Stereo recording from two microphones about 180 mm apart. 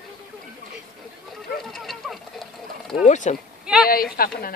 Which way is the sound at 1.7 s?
Centre (ahead or behind).